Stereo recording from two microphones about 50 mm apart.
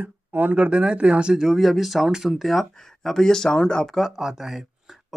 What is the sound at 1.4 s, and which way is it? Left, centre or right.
Speech, centre.